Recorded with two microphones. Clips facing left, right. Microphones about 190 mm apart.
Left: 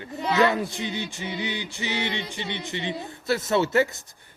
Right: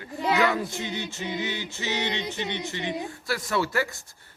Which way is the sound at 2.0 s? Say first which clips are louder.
Right 2 dB; 20° right (ahead or behind).